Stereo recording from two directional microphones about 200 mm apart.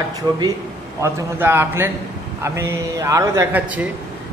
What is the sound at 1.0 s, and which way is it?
A man's voice, 10° right (ahead or behind).